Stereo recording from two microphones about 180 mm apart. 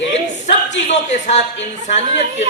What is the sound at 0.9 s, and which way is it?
Speech, 40° left (ahead or behind).